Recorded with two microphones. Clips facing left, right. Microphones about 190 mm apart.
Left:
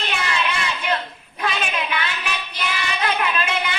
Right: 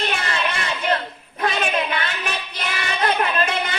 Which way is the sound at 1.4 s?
45° right (ahead or behind).